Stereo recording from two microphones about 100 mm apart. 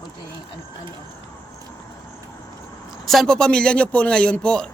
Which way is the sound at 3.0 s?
Centre (ahead or behind).